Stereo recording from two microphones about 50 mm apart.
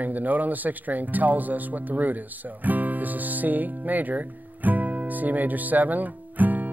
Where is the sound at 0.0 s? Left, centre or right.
Right.